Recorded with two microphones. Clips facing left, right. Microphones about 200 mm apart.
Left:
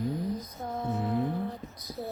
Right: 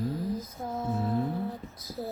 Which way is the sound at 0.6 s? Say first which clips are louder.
Even; centre (ahead or behind).